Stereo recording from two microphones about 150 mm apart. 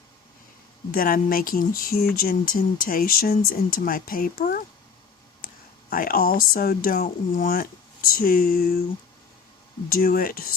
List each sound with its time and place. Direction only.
0.9 s speech: 70° left (ahead or behind)
5.4 s a sound: 70° left (ahead or behind)
5.9 s speech: 75° left (ahead or behind)
9.9 s speech: 75° left (ahead or behind)